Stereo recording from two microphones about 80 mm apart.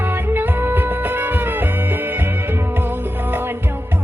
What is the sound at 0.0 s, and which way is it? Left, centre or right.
Music, right.